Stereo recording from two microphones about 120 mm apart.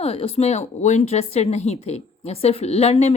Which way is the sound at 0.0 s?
55° left (ahead or behind).